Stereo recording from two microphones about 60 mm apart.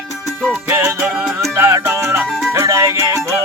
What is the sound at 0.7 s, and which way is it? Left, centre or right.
Music, right.